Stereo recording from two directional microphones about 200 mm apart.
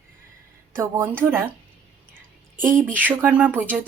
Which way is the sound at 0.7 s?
10° right (ahead or behind).